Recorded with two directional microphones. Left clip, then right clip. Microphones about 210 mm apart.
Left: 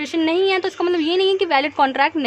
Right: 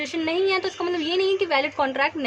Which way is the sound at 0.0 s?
40° left (ahead or behind).